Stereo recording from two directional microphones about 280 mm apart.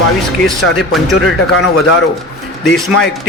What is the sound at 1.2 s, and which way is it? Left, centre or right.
Speech, left.